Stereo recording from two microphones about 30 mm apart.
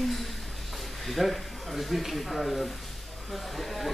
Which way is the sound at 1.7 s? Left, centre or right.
Centre.